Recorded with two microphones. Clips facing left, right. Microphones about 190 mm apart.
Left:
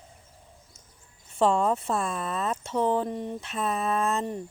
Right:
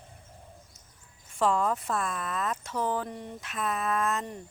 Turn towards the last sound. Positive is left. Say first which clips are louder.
# left 3 dB
turn(degrees=25)  # may be behind; listen again after turning